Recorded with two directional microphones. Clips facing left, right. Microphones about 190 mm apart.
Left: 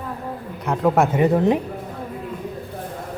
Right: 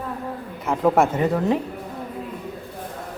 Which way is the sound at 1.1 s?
20° left (ahead or behind).